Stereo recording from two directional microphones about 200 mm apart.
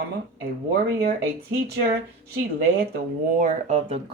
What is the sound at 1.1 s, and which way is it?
Speech, 50° right (ahead or behind).